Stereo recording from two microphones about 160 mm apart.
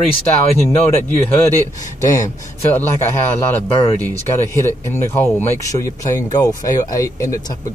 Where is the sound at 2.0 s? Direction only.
20° left (ahead or behind).